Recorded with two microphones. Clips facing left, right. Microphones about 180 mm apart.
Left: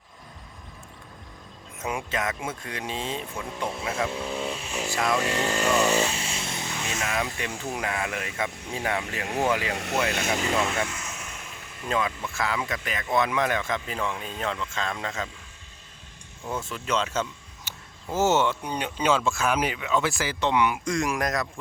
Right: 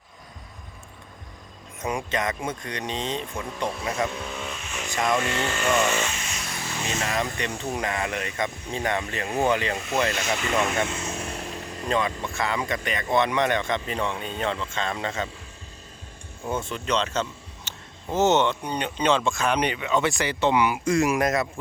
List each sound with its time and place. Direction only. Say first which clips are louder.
1.8 s speech: right 2 dB; 5° left (ahead or behind)
4.1 s speech: left 3 dB; 30° left (ahead or behind)
4.9 s speech: right 2 dB; centre (ahead or behind)
5.2 s speech: left 1 dB; 35° left (ahead or behind)
7.0 s speech: right 1 dB; 5° left (ahead or behind)
9.7 s speech: right 1 dB; 70° left (ahead or behind)
10.6 s vehicle: right 2 dB; 20° right (ahead or behind); by 11.9 s 35° right (ahead or behind)
11.9 s speech: right 2 dB; 5° left (ahead or behind)
16.5 s speech: right 2 dB; centre (ahead or behind)